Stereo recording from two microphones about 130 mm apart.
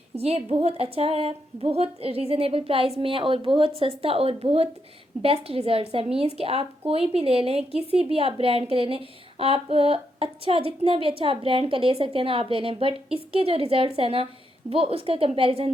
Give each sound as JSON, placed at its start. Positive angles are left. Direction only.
{"t": 0.2, "sound": "speech", "side_deg": -50}